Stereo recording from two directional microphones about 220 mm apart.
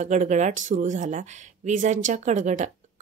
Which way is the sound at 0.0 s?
35° right (ahead or behind).